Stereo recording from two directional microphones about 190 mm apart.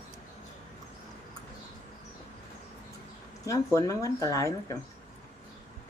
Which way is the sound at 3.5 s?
15° left (ahead or behind).